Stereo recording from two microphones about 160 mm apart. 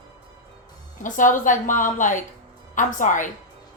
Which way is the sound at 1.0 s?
55° left (ahead or behind).